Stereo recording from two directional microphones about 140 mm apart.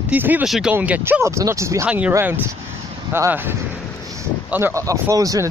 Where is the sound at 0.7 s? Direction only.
15° right (ahead or behind).